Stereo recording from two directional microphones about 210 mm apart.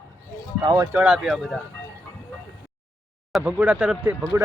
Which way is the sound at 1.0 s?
5° right (ahead or behind).